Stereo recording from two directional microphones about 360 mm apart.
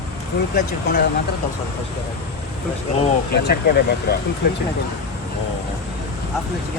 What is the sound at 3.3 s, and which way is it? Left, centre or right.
Speech, left.